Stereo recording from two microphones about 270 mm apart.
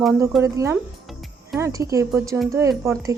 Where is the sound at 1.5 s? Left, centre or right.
Centre.